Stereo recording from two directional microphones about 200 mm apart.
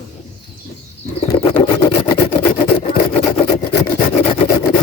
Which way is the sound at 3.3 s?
30° left (ahead or behind).